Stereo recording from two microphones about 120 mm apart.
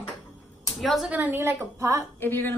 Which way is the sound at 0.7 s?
Centre (ahead or behind).